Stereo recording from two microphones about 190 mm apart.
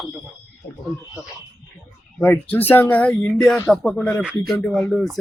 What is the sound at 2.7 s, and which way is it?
Speech, 10° left (ahead or behind).